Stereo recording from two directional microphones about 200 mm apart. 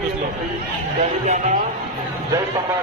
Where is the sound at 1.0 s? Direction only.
35° right (ahead or behind).